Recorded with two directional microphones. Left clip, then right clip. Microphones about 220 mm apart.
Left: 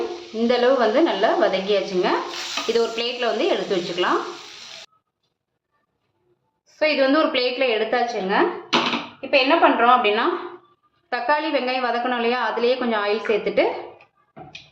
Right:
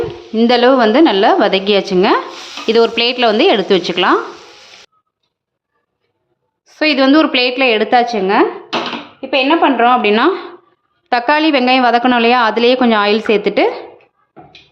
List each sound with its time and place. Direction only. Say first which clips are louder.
0.3 s a woman's voice: right 8 dB; 50° right (ahead or behind)
6.7 s a woman's voice: right 7 dB; 55° right (ahead or behind)